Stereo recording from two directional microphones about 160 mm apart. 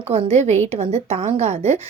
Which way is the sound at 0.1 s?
40° right (ahead or behind).